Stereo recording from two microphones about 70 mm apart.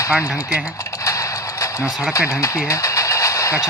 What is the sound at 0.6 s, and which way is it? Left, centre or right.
Typing, left.